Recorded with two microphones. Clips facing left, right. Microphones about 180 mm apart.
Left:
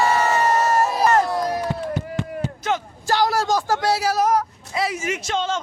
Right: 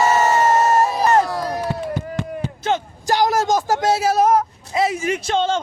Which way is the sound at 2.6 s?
25° right (ahead or behind).